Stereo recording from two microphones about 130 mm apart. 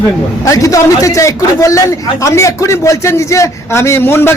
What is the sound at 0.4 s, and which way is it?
A man's voice, 25° left (ahead or behind).